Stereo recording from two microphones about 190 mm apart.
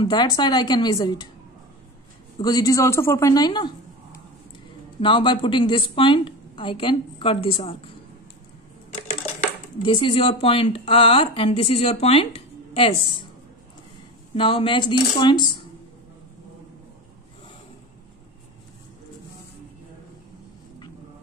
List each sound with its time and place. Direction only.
0.0 s speech: 25° left (ahead or behind)
2.3 s speech: 20° left (ahead or behind)
5.0 s speech: 25° left (ahead or behind)
9.8 s speech: 25° left (ahead or behind)
14.3 s speech: 30° left (ahead or behind)